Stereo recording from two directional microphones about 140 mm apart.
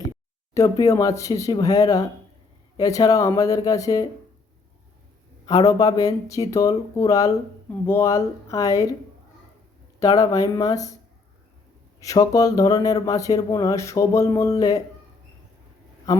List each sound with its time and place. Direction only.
0.5 s speech: 25° left (ahead or behind)
5.5 s speech: 25° left (ahead or behind)
10.0 s speech: 25° left (ahead or behind)
11.9 s speech: 25° left (ahead or behind)
16.1 s speech: 25° left (ahead or behind)